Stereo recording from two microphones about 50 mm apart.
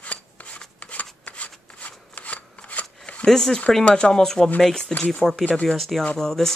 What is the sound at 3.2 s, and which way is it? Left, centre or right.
Speech, centre.